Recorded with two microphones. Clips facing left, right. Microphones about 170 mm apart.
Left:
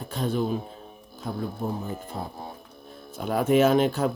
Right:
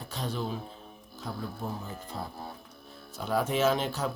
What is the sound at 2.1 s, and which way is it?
Mantra, 45° left (ahead or behind).